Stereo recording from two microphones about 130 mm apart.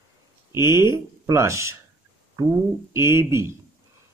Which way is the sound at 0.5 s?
20° right (ahead or behind).